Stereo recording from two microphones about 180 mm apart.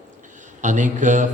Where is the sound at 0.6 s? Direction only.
45° right (ahead or behind).